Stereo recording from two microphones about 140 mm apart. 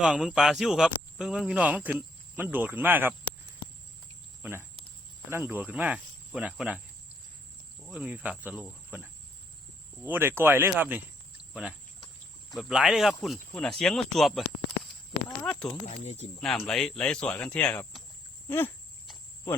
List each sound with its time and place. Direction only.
0.0 s speech: 5° right (ahead or behind)
5.3 s speech: 15° right (ahead or behind)
7.9 s speech: 10° right (ahead or behind)
15.4 s speech: 5° left (ahead or behind)
16.0 s speech: 55° left (ahead or behind)
16.4 s speech: centre (ahead or behind)
18.4 s a sound: 15° left (ahead or behind)